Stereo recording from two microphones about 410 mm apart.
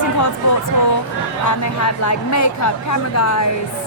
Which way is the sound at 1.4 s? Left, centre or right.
Left.